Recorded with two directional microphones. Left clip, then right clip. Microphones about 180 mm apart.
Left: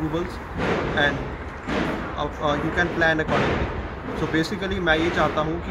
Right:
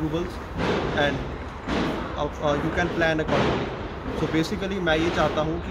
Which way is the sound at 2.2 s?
15° right (ahead or behind).